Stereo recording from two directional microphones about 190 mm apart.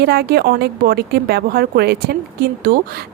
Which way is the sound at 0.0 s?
55° right (ahead or behind).